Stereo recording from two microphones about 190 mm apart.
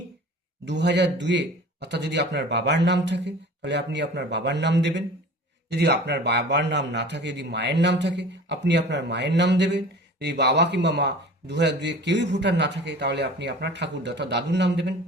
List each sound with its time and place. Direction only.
0.6 s a man's voice: 65° right (ahead or behind)